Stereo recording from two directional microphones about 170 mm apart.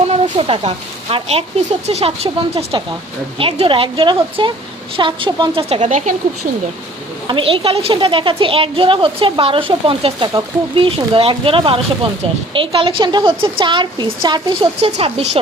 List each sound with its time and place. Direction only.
0.1 s speech: 35° right (ahead or behind)
7.3 s speech: 30° right (ahead or behind)
14.8 s speech: 40° right (ahead or behind)